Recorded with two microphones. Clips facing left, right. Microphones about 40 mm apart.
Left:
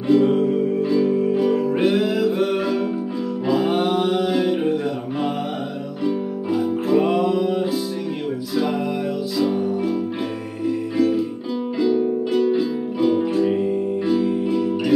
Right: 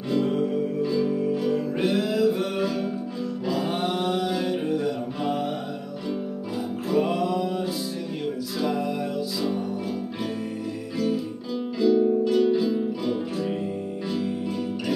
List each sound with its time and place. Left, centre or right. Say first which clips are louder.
0.1 s music: left 7 dB; left
6.0 s music: left 8 dB; left
11.8 s music: even; centre